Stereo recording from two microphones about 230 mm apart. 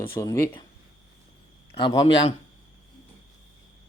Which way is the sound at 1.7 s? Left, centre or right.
Left.